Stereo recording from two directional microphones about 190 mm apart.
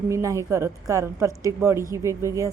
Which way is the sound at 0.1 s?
15° right (ahead or behind).